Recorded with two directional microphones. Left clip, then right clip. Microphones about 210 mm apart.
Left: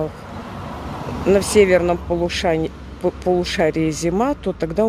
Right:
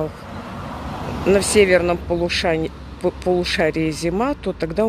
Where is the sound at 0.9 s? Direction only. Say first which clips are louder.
Even; 30° right (ahead or behind).